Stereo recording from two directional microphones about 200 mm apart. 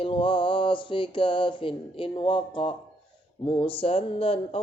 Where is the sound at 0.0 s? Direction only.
25° left (ahead or behind).